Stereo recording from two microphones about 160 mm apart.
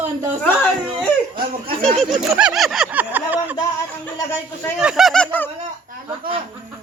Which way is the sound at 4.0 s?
15° left (ahead or behind).